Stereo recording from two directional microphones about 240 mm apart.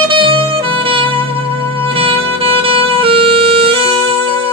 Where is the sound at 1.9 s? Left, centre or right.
Right.